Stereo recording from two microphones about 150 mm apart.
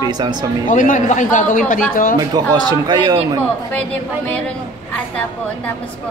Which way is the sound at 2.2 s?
25° right (ahead or behind).